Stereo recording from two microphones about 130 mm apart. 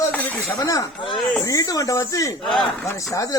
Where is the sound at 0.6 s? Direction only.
25° left (ahead or behind).